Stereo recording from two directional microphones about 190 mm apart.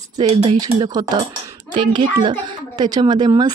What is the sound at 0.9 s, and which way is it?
A woman's voice, 20° right (ahead or behind).